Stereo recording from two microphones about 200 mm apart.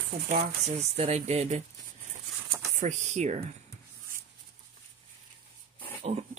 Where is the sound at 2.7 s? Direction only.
35° right (ahead or behind).